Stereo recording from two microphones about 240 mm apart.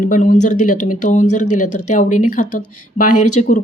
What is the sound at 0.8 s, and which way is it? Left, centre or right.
Speech, left.